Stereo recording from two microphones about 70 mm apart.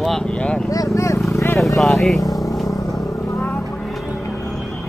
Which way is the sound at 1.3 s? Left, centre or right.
Left.